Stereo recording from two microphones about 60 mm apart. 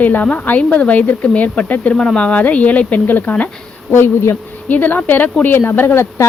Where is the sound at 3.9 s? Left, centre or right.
Left.